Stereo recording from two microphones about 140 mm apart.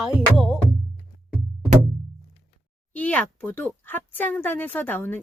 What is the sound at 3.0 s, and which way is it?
Speech, 10° left (ahead or behind).